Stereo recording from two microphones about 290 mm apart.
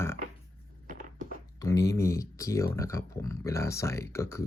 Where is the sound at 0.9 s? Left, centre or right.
Right.